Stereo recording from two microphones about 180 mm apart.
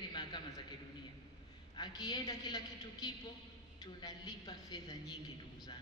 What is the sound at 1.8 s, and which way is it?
A man's voice, 20° left (ahead or behind).